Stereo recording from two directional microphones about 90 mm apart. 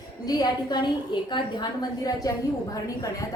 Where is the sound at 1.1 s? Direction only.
60° left (ahead or behind).